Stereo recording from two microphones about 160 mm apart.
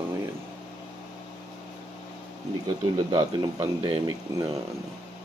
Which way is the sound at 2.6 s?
25° right (ahead or behind).